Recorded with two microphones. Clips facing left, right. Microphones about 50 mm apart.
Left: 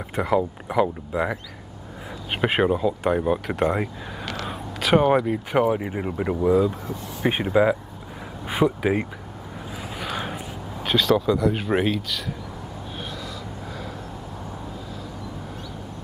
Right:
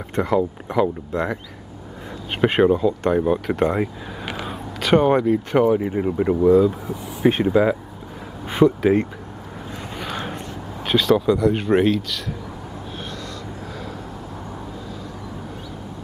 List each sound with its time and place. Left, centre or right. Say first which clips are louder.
0.1 s speech: right 2 dB; centre
2.4 s speech: right 4 dB; centre
9.9 s a sound: right 1 dB; centre